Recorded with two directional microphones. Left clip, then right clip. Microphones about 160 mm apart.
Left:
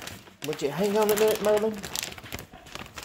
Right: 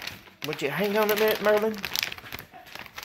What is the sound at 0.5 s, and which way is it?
Speech, centre (ahead or behind).